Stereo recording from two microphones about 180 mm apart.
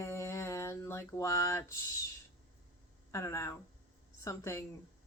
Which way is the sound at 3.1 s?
15° left (ahead or behind).